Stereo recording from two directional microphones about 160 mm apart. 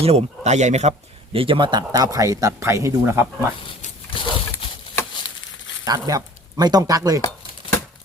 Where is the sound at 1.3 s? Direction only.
35° right (ahead or behind); by 3.2 s 15° right (ahead or behind).